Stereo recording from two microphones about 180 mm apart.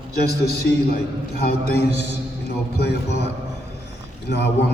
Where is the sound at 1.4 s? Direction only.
65° left (ahead or behind).